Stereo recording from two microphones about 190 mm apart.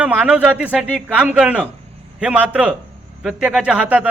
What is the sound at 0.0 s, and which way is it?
A man's voice, 5° right (ahead or behind).